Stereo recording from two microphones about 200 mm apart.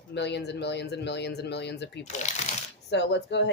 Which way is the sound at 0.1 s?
60° left (ahead or behind).